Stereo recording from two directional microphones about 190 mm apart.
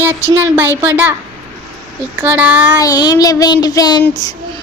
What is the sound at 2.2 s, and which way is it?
Speech, 10° right (ahead or behind).